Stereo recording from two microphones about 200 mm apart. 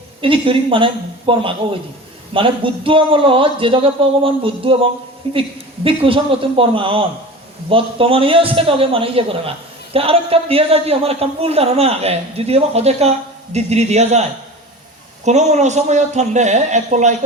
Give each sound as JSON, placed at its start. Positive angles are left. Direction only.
{"t": 0.2, "sound": "a man's voice", "side_deg": -25}